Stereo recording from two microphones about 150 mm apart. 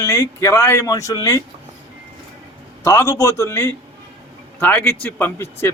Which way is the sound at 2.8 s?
20° left (ahead or behind).